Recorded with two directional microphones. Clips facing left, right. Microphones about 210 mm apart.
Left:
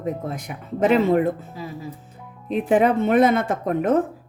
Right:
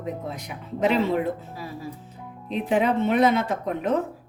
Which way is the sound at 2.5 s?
50° left (ahead or behind).